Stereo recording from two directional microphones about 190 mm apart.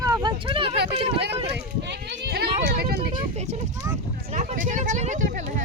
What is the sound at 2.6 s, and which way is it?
Vehicle, 55° right (ahead or behind).